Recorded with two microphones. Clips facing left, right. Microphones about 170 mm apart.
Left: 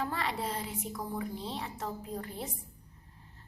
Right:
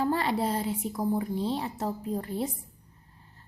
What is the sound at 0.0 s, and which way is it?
A woman's voice, 35° right (ahead or behind).